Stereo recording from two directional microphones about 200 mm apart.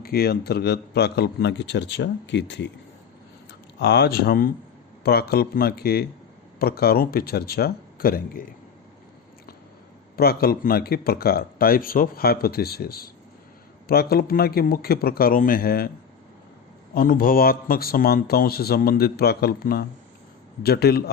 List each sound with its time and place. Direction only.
0.0 s a man's voice: 50° left (ahead or behind)
3.8 s speech: 55° left (ahead or behind)
10.2 s speech: 50° left (ahead or behind)
16.9 s speech: 45° left (ahead or behind)